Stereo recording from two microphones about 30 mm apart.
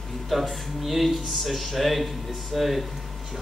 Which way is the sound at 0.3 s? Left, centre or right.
Centre.